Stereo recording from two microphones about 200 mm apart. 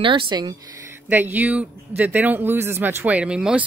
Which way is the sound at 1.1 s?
10° right (ahead or behind).